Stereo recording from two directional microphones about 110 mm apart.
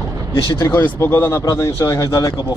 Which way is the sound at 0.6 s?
20° left (ahead or behind).